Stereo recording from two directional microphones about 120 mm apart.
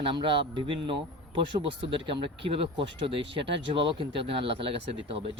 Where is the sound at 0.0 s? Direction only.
45° right (ahead or behind).